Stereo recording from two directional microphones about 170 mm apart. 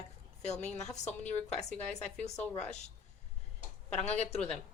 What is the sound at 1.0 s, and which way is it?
Speech, 40° left (ahead or behind).